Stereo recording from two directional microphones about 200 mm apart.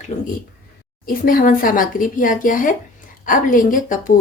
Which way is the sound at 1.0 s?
45° left (ahead or behind).